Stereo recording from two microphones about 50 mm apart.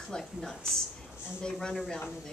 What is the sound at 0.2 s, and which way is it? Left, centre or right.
A woman's voice, centre.